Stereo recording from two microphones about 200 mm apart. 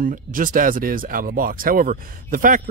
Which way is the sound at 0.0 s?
45° right (ahead or behind).